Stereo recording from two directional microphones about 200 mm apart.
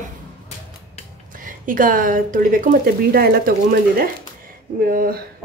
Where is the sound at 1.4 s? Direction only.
45° right (ahead or behind).